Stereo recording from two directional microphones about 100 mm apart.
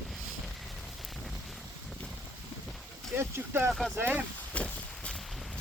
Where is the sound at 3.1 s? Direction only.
25° right (ahead or behind).